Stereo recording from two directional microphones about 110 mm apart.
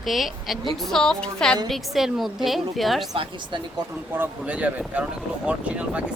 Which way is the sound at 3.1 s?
55° right (ahead or behind).